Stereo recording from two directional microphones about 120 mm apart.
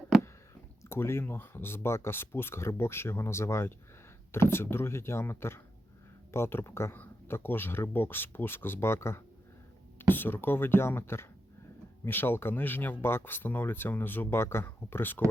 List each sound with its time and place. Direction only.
0.9 s speech: 20° left (ahead or behind)